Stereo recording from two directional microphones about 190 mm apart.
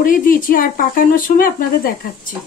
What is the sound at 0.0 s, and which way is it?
Speech, 45° left (ahead or behind).